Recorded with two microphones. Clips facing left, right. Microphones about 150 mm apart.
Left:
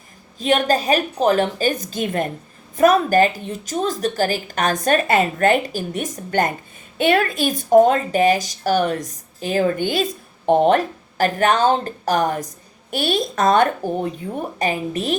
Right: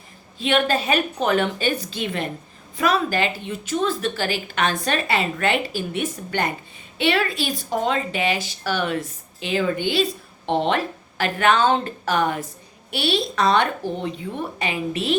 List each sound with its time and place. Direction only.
0.3 s a woman's voice: 40° left (ahead or behind)